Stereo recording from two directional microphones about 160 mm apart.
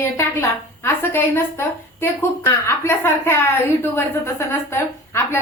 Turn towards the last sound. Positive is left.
turn(degrees=15)  # may be behind; listen again after turning